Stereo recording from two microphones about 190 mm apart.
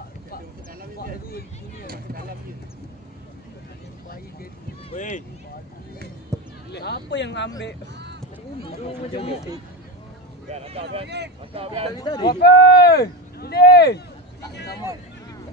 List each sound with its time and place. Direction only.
4.9 s speech: 40° left (ahead or behind)
6.3 s basketball bounce: 15° right (ahead or behind)
6.7 s speech: 60° left (ahead or behind)
8.8 s speech: 30° left (ahead or behind)
10.5 s speech: 30° right (ahead or behind)
12.0 s speech: 20° left (ahead or behind)
12.4 s speech: 55° left (ahead or behind)